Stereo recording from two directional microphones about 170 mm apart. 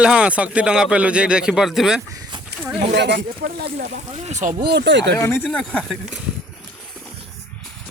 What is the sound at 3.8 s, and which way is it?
Speech, 40° right (ahead or behind).